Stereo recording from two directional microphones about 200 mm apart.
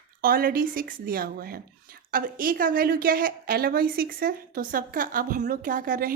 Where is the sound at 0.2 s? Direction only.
45° right (ahead or behind).